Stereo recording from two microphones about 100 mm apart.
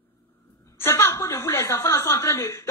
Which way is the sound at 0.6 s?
25° left (ahead or behind).